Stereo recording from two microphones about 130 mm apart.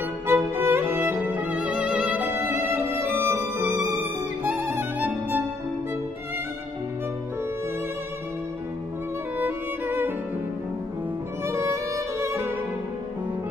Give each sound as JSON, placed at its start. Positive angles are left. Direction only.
{"t": 0.3, "sound": "music", "side_deg": -15}
{"t": 9.4, "sound": "music", "side_deg": -15}
{"t": 11.4, "sound": "violin", "side_deg": -20}